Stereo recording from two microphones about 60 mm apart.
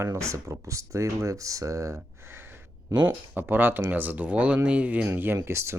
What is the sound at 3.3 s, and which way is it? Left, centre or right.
Speech, right.